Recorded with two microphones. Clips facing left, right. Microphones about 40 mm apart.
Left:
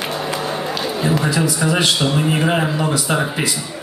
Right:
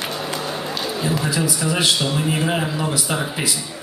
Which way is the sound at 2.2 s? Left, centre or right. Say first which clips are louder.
Left 4 dB; centre.